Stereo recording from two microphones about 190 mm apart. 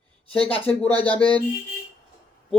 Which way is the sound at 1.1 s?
30° left (ahead or behind).